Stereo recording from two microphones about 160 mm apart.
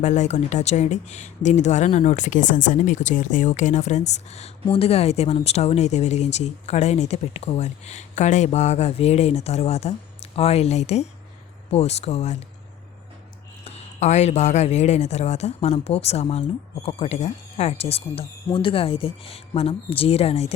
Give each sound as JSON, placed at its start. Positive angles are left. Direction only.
{"t": 0.0, "sound": "speech", "side_deg": 45}
{"t": 13.7, "sound": "speech", "side_deg": 40}